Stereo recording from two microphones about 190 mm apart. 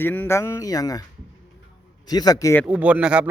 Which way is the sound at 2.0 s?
20° left (ahead or behind).